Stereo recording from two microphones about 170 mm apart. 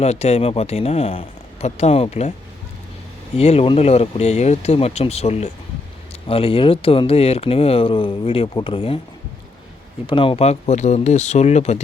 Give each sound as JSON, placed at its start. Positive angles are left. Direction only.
{"t": 0.0, "sound": "speech", "side_deg": 40}
{"t": 3.3, "sound": "speech", "side_deg": 35}
{"t": 10.1, "sound": "speech", "side_deg": 30}